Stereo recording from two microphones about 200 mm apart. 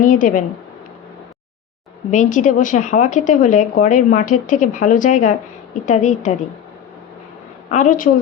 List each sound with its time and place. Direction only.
0.0 s speech: 40° left (ahead or behind)
2.0 s speech: 40° left (ahead or behind)
7.7 s speech: 40° left (ahead or behind)